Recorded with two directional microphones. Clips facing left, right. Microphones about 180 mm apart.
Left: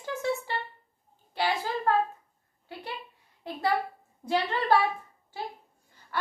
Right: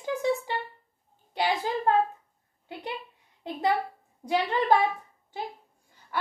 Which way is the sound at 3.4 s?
20° right (ahead or behind).